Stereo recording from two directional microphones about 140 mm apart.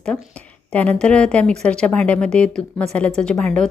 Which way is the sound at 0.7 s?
10° left (ahead or behind).